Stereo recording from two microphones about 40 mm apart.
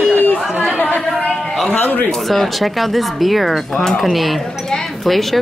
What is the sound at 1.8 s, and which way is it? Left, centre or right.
Speech, left.